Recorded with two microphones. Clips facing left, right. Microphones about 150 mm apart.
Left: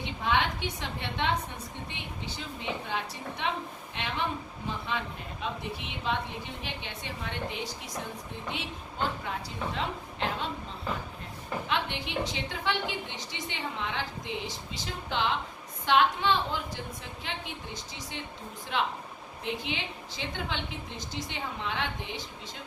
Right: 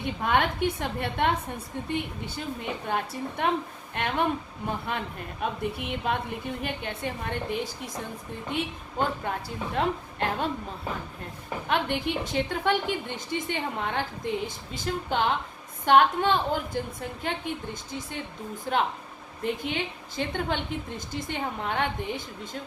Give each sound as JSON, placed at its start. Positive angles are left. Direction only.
{"t": 0.0, "sound": "a woman's voice", "side_deg": -50}
{"t": 11.7, "sound": "a woman's voice", "side_deg": -50}
{"t": 18.6, "sound": "a woman's voice", "side_deg": -45}